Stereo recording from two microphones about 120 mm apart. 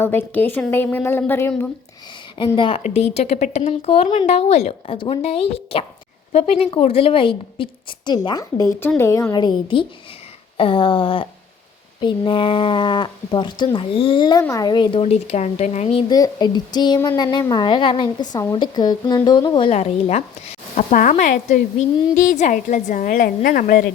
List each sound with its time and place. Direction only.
0.0 s speech: 15° left (ahead or behind)
2.6 s a woman's voice: 45° left (ahead or behind)
2.8 s a woman's voice: 65° left (ahead or behind)
4.9 s a woman's voice: 50° left (ahead or behind); by 9.2 s 25° left (ahead or behind)
9.3 s a woman's voice: 40° left (ahead or behind); by 16.0 s 60° left (ahead or behind)
16.0 s a woman's voice: 35° left (ahead or behind)
19.7 s a woman's voice: 70° left (ahead or behind); by 23.0 s 90° left